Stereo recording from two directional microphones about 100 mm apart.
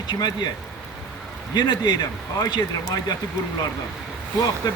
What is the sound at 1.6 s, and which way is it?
Speech, 45° left (ahead or behind).